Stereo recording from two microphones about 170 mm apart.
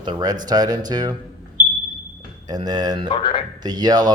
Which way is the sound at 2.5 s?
25° right (ahead or behind).